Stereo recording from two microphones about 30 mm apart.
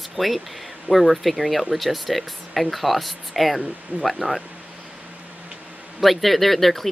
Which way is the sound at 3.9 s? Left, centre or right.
Right.